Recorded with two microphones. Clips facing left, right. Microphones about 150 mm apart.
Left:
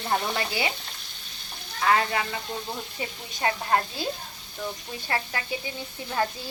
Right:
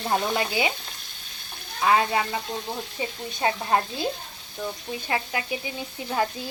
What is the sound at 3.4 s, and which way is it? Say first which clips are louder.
Stir: right 1 dB; 20° right (ahead or behind).